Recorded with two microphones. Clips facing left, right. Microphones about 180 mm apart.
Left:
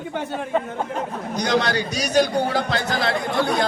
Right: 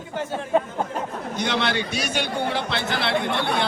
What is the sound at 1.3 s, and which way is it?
A man's voice, 40° left (ahead or behind).